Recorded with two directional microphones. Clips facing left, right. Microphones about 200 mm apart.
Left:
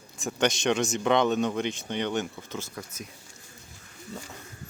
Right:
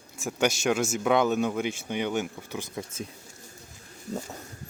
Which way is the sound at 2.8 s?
25° right (ahead or behind).